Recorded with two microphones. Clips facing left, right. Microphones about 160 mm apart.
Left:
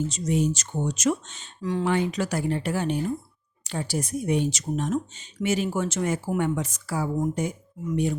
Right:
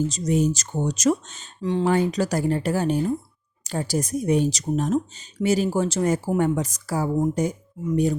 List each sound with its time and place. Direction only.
0.1 s speech: 40° right (ahead or behind)
1.6 s speech: 30° right (ahead or behind)
1.9 s speech: 40° right (ahead or behind)